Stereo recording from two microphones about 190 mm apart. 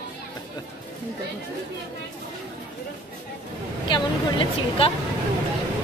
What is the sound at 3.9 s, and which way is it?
Speech, 25° left (ahead or behind).